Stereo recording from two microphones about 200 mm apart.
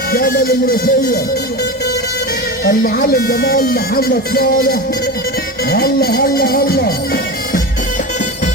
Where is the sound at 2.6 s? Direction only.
45° left (ahead or behind).